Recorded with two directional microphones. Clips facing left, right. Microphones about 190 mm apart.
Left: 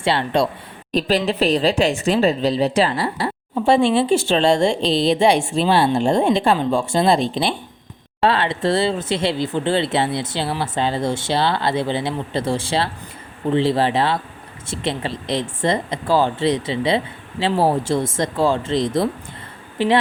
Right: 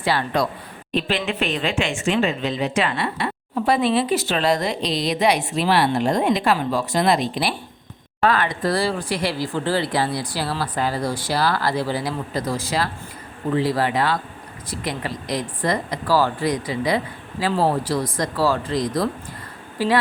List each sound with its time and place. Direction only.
0.0 s speech: 25° left (ahead or behind)
0.9 s speech: 40° left (ahead or behind)